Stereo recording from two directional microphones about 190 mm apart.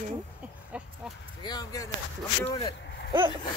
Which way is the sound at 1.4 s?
20° left (ahead or behind).